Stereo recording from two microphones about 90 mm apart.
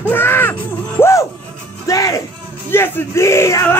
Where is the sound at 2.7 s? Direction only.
25° left (ahead or behind).